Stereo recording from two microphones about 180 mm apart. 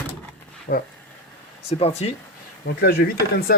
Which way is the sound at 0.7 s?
45° left (ahead or behind).